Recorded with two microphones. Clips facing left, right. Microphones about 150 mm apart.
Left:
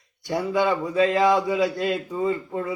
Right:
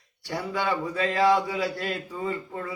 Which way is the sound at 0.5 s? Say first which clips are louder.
Left 6 dB; 20° left (ahead or behind).